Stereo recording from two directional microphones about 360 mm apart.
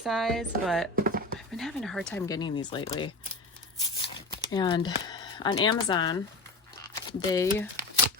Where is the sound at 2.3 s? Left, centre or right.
Centre.